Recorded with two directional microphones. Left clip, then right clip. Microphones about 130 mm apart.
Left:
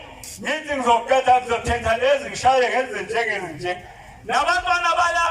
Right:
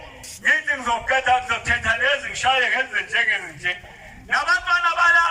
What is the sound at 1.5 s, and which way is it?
A man's voice, 20° left (ahead or behind).